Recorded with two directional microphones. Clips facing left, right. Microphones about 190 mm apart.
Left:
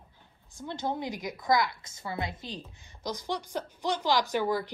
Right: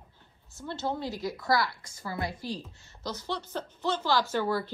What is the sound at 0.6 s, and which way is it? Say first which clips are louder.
A woman's voice: even; 15° left (ahead or behind).